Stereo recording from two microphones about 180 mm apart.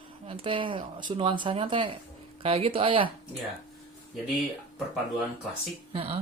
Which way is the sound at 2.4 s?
30° right (ahead or behind).